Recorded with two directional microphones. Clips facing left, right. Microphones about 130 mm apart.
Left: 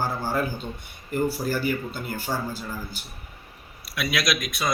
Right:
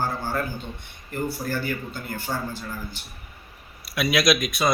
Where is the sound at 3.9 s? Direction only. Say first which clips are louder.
Right 5 dB; 15° right (ahead or behind).